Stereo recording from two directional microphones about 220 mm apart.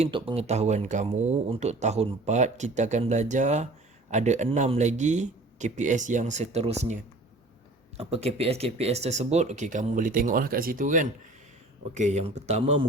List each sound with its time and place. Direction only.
0.0 s speech: 25° right (ahead or behind)